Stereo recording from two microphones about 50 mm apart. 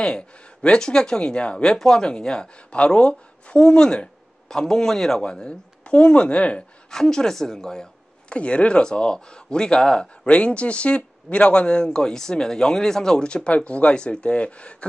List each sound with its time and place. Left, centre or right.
0.0 s speech: centre
6.9 s speech: centre